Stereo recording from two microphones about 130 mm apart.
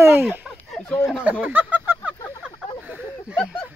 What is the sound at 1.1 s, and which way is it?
Speech, 10° right (ahead or behind).